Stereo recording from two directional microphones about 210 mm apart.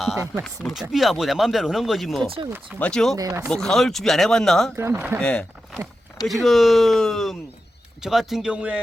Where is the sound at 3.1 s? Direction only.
15° right (ahead or behind).